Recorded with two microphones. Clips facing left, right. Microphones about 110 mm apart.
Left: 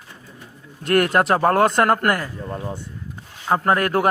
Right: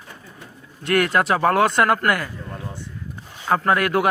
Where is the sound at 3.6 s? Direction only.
40° left (ahead or behind).